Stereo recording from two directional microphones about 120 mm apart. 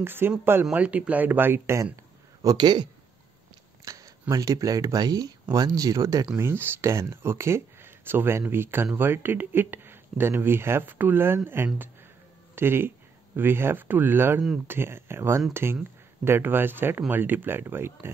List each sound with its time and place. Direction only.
0.0 s speech: 20° right (ahead or behind)
2.4 s speech: 35° right (ahead or behind); by 18.1 s 20° right (ahead or behind)